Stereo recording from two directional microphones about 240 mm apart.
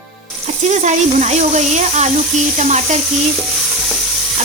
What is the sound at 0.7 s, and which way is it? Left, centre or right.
Speech, right.